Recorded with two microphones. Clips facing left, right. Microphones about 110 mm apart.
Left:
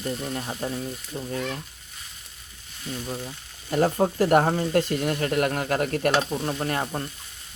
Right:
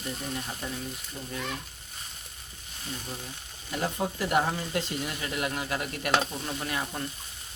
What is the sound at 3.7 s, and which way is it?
Speech, 45° left (ahead or behind).